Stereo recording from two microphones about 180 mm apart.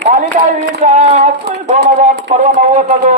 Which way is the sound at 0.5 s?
40° right (ahead or behind).